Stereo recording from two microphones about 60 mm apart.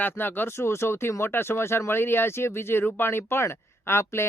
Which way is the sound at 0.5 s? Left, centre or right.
Left.